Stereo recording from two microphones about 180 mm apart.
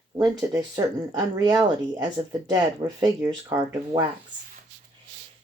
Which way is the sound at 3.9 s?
30° right (ahead or behind).